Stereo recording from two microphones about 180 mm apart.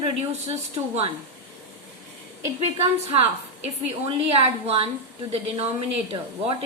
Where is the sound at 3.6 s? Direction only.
35° right (ahead or behind).